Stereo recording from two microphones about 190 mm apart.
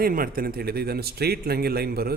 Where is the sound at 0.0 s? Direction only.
50° right (ahead or behind).